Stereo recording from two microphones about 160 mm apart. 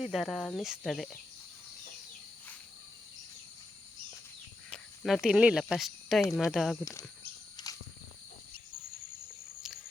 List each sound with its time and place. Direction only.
0.0 s speech: centre (ahead or behind)
4.7 s speech: centre (ahead or behind)
7.5 s a sound: 25° left (ahead or behind)